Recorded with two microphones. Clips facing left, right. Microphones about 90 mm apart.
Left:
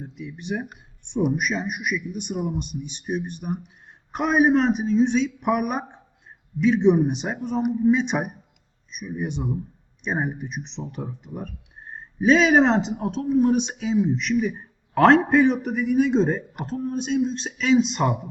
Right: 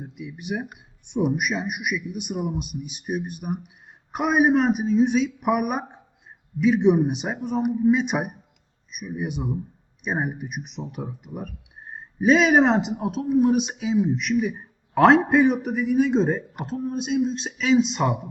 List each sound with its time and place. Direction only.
0.0 s speech: 5° right (ahead or behind)